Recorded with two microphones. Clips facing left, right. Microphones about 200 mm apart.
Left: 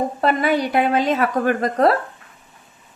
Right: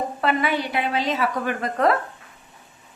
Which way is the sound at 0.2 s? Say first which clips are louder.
Left 4 dB; 40° left (ahead or behind).